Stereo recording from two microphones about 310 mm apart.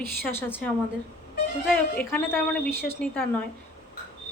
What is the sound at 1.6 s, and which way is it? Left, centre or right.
A woman's voice, centre.